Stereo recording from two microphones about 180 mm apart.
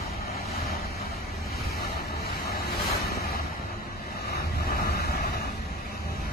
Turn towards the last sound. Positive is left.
turn(degrees=65)  # may be behind; listen again after turning